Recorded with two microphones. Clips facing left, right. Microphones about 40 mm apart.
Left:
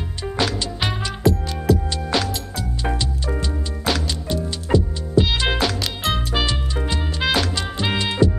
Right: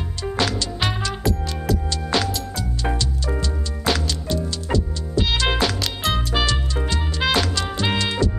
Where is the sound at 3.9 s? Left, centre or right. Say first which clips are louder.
Right 1 dB; centre.